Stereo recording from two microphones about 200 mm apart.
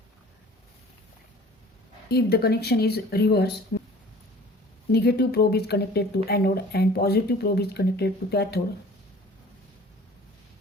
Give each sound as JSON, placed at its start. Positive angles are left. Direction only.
{"t": 2.0, "sound": "speech", "side_deg": 50}
{"t": 3.7, "sound": "a sound", "side_deg": 60}
{"t": 4.9, "sound": "speech", "side_deg": 55}